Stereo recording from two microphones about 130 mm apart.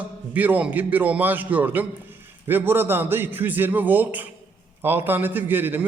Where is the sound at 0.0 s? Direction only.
10° right (ahead or behind).